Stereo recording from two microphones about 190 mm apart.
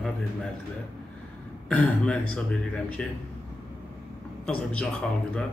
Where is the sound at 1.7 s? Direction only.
5° left (ahead or behind).